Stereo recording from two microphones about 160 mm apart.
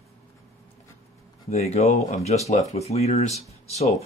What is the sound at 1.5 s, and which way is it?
Speech, 40° left (ahead or behind).